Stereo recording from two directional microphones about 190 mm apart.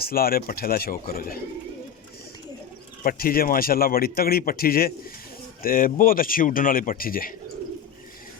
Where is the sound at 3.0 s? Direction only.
50° left (ahead or behind).